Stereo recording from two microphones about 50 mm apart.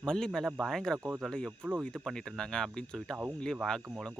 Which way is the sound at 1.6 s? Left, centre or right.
Right.